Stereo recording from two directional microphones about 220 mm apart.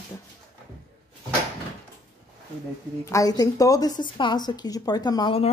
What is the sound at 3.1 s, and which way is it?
A woman's voice, 15° left (ahead or behind).